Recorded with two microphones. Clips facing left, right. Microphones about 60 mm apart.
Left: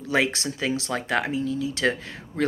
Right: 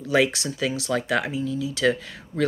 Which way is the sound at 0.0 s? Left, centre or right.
Left.